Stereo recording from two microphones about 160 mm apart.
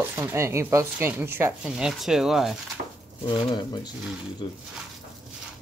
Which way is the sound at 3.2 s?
30° left (ahead or behind).